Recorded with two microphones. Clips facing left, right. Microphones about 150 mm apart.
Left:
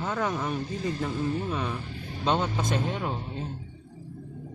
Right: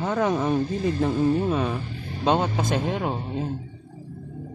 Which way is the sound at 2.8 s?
90° right.